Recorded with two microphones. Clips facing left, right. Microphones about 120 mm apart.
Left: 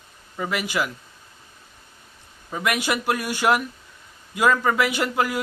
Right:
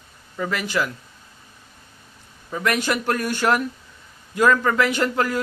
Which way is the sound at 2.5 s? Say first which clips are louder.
Right 2 dB; 10° left (ahead or behind).